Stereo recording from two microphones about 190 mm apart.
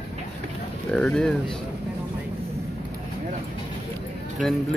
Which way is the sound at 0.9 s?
5° left (ahead or behind).